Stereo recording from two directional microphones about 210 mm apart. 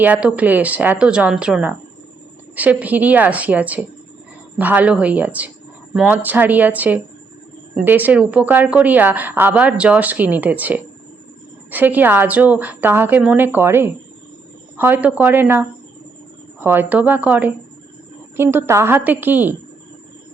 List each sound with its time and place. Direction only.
0.0 s a woman's voice: 5° right (ahead or behind)